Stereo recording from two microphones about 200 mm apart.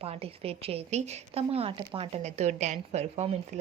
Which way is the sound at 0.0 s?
30° right (ahead or behind).